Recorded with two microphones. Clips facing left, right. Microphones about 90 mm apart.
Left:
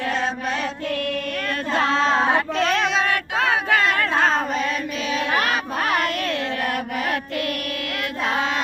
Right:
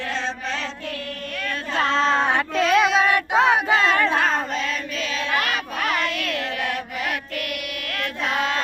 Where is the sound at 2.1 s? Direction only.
5° left (ahead or behind).